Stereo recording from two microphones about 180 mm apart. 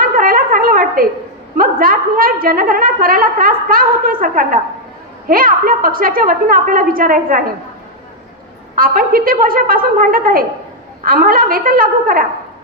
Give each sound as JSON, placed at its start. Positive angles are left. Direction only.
{"t": 0.0, "sound": "a sound", "side_deg": -50}
{"t": 1.5, "sound": "a woman's voice", "side_deg": -50}
{"t": 8.7, "sound": "a woman's voice", "side_deg": -50}